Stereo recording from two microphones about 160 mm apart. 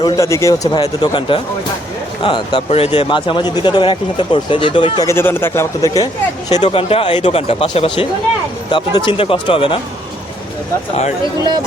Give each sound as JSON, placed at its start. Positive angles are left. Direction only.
{"t": 0.0, "sound": "speech", "side_deg": 20}
{"t": 5.0, "sound": "speech", "side_deg": 15}